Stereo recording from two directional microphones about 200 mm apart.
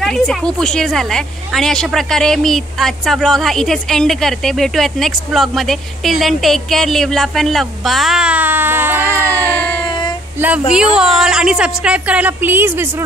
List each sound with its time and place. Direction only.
0.0 s a woman's voice: 5° left (ahead or behind); by 9.5 s 15° right (ahead or behind)
9.8 s child singing: 25° left (ahead or behind)
10.7 s a woman's voice: 5° right (ahead or behind)